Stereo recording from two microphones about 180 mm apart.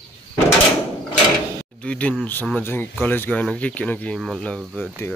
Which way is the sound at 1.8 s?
5° left (ahead or behind).